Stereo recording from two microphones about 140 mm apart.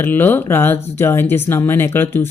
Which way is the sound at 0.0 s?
15° left (ahead or behind).